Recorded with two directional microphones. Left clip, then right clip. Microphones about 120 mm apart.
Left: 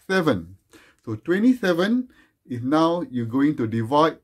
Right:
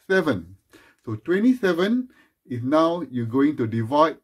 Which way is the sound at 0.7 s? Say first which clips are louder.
Left 1 dB; 25° left (ahead or behind).